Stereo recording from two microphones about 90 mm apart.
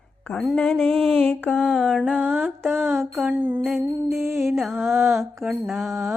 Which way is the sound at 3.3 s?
25° right (ahead or behind).